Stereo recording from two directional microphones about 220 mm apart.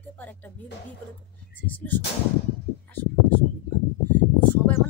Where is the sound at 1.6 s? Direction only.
10° left (ahead or behind).